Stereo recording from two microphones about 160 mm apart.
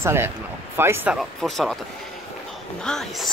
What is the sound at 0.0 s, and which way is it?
Speech, 15° right (ahead or behind).